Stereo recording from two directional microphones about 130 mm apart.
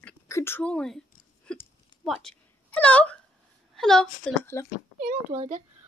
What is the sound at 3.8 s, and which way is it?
Speech, 5° left (ahead or behind).